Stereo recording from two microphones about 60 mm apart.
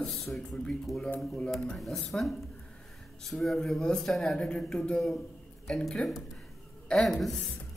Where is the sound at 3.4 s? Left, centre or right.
Centre.